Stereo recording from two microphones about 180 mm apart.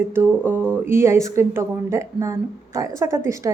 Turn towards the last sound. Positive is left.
turn(degrees=-15)  # may be behind; listen again after turning